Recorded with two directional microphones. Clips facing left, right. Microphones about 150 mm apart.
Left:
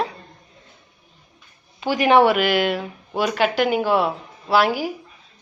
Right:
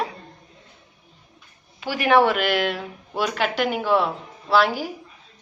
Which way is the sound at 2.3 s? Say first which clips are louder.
Left 3 dB; 5° left (ahead or behind).